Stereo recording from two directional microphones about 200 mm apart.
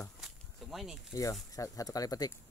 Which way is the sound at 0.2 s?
Centre (ahead or behind).